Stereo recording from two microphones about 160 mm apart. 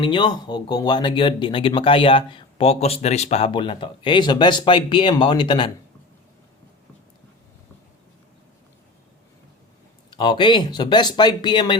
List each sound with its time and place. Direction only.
0.0 s speech: 30° left (ahead or behind)
10.1 s speech: 30° left (ahead or behind)